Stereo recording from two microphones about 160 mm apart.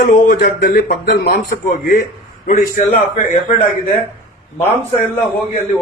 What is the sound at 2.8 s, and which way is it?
Speech, 55° left (ahead or behind).